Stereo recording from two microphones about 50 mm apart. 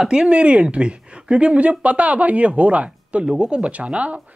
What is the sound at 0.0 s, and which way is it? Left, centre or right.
Speech, centre.